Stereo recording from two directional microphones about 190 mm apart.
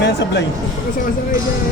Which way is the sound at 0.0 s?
65° left (ahead or behind).